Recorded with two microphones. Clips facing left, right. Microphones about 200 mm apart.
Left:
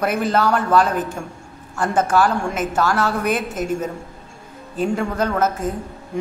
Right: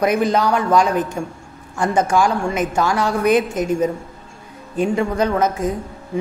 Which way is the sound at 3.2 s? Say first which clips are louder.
Right 6 dB; 5° left (ahead or behind).